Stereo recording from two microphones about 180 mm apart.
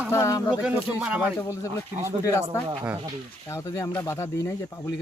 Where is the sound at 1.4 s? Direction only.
15° left (ahead or behind).